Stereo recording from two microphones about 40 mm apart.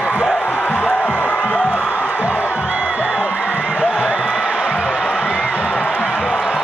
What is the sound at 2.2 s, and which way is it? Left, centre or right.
Music, right.